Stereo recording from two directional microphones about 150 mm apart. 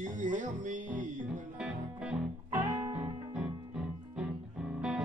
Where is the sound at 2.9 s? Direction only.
10° right (ahead or behind).